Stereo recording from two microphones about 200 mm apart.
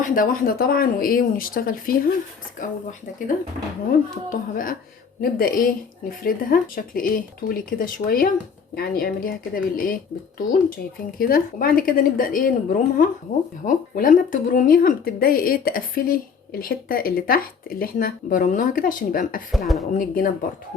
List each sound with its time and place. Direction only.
0.0 s speech: 45° left (ahead or behind)
19.5 s speech: centre (ahead or behind)
19.9 s speech: 45° left (ahead or behind)